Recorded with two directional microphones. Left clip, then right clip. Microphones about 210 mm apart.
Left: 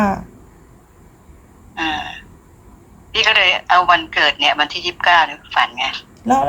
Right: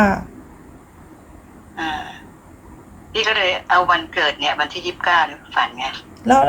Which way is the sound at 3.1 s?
40° left (ahead or behind).